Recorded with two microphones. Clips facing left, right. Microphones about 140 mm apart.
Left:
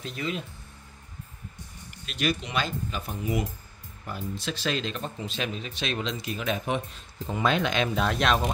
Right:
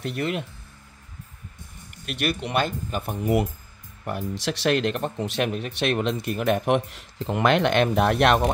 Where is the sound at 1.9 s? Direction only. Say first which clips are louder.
Right 1 dB; 60° right (ahead or behind).